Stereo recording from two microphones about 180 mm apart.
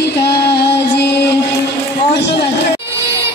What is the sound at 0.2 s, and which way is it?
Music, 65° left (ahead or behind).